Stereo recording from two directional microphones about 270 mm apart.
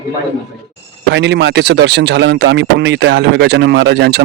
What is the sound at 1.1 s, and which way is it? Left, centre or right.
Speech, right.